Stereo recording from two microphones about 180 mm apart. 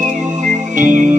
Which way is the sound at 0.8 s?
45° right (ahead or behind).